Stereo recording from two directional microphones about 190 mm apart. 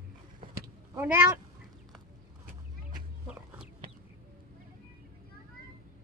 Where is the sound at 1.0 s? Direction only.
10° right (ahead or behind).